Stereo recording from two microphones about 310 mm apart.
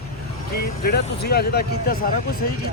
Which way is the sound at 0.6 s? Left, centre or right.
Left.